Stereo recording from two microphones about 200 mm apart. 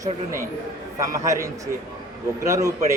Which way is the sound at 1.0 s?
15° right (ahead or behind).